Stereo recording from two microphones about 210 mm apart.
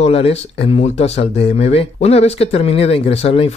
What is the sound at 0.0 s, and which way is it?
Speech, 30° left (ahead or behind).